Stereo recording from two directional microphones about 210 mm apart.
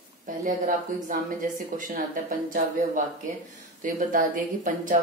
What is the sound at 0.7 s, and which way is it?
Speech, 40° right (ahead or behind).